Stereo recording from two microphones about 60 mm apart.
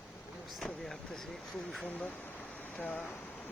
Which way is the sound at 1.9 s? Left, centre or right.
Left.